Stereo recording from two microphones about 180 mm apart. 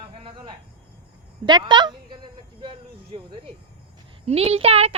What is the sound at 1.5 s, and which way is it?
Speech, 25° right (ahead or behind).